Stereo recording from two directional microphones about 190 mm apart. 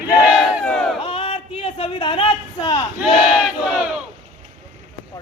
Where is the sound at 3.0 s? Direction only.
5° right (ahead or behind).